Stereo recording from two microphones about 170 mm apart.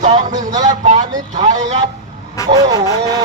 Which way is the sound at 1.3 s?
45° right (ahead or behind).